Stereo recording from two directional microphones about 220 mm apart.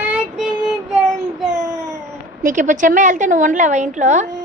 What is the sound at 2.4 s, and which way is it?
A woman's voice, 35° right (ahead or behind).